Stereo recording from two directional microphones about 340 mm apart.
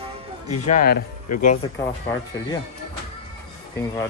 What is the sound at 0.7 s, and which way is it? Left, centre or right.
Speech, left.